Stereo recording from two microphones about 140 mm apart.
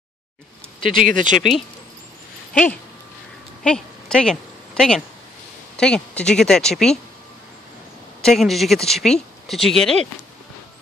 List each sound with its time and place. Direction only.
0.9 s speech: 70° right (ahead or behind)
3.6 s a woman's voice: 5° left (ahead or behind)
8.2 s speech: centre (ahead or behind)